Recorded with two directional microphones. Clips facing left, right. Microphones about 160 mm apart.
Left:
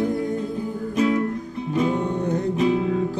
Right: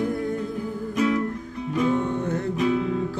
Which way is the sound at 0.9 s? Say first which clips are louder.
Left 2 dB; 25° left (ahead or behind).